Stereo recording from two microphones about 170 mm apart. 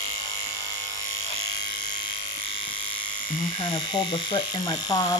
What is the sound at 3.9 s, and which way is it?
Speech, 25° left (ahead or behind).